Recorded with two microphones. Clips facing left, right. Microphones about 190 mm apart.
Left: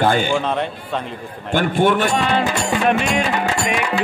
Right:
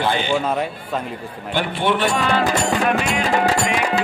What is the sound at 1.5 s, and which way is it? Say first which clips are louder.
Speech: left 4 dB; 45° left (ahead or behind).